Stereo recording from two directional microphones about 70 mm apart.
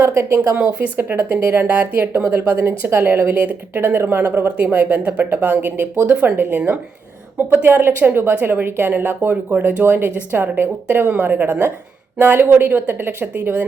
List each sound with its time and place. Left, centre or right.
0.0 s speech: right